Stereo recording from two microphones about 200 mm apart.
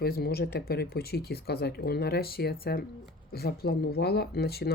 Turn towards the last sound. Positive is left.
turn(degrees=50)  # may be behind; listen again after turning